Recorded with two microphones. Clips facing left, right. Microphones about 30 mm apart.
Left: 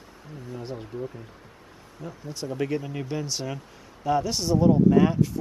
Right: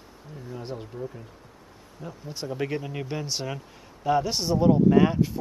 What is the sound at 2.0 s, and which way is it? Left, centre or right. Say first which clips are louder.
Speech: left 1 dB; centre.